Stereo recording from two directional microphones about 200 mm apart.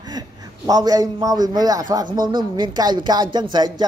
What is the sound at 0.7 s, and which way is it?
Speech, 20° right (ahead or behind).